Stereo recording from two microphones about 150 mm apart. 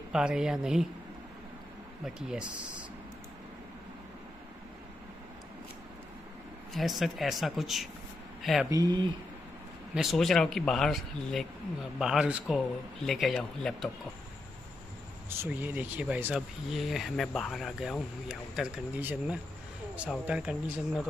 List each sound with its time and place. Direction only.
0.1 s speech: 5° right (ahead or behind)
2.0 s speech: 5° right (ahead or behind)
6.7 s speech: centre (ahead or behind)
8.6 s speech: 25° right (ahead or behind)
9.9 s speech: centre (ahead or behind)
15.2 s speech: 15° right (ahead or behind)